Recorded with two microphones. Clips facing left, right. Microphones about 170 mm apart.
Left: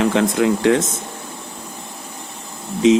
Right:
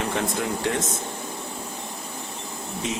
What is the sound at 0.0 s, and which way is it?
Speech, 90° left.